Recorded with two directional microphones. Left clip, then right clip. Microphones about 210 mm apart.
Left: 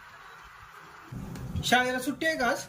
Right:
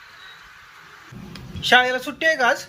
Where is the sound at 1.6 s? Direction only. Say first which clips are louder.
Right 9 dB; 5° left (ahead or behind).